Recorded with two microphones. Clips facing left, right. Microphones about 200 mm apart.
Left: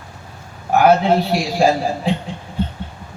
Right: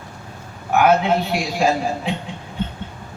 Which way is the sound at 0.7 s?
35° left (ahead or behind).